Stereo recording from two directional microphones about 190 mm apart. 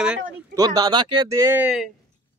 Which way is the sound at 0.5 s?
20° right (ahead or behind).